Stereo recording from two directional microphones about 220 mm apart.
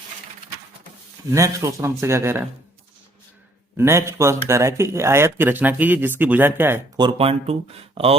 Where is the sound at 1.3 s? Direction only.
15° right (ahead or behind).